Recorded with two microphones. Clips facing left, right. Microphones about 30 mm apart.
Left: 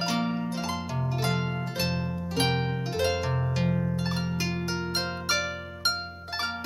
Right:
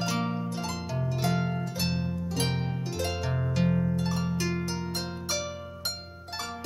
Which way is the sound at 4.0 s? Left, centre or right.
Left.